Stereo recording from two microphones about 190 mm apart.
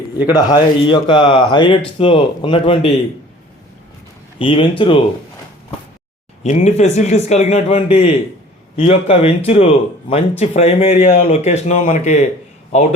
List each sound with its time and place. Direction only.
0.3 s speech: 25° left (ahead or behind)
4.4 s speech: 25° left (ahead or behind)
6.4 s a man's voice: 35° left (ahead or behind)